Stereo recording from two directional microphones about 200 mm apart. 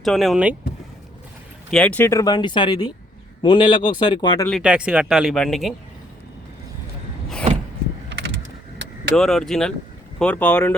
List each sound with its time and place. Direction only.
0.0 s speech: centre (ahead or behind)
1.7 s speech: 5° left (ahead or behind); by 4.4 s 20° left (ahead or behind)
4.4 s speech: centre (ahead or behind)
8.8 s vehicle: 65° right (ahead or behind)
9.1 s speech: centre (ahead or behind)